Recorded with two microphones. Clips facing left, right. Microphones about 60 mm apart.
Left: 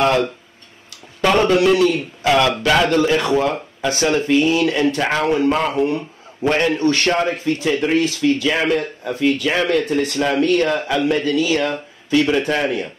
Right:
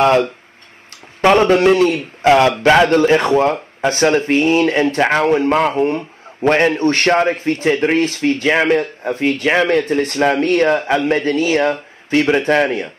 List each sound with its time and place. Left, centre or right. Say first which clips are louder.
0.0 s speech: right 4 dB; right